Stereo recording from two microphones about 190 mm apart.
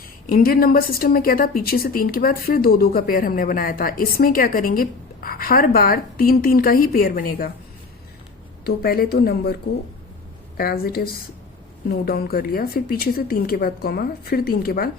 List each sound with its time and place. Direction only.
0.3 s a woman's voice: 50° left (ahead or behind)
8.6 s speech: 55° left (ahead or behind)
10.6 s a woman's voice: 50° left (ahead or behind)